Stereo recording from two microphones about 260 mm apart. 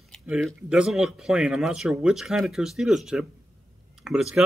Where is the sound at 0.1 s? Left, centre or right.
Centre.